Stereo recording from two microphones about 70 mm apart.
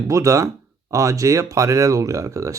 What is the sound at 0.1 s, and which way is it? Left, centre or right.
Speech, right.